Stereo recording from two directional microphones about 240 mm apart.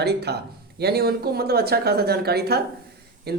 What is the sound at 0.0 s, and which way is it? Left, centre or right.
Speech, right.